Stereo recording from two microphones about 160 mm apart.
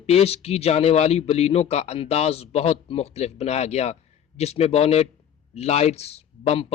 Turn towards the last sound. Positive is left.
turn(degrees=40)  # may be behind; listen again after turning